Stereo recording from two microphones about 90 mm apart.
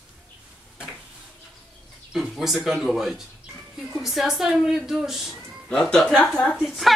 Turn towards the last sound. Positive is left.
turn(degrees=-5)  # may be behind; listen again after turning